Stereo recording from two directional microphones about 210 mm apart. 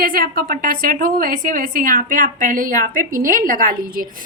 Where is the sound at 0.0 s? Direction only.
45° right (ahead or behind).